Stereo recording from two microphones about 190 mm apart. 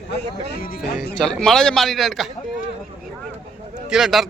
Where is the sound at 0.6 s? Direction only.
50° left (ahead or behind).